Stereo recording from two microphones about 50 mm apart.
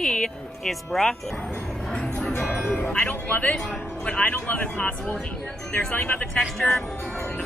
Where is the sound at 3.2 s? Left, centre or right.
Left.